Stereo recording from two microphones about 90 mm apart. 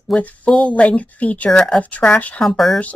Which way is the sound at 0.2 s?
15° left (ahead or behind).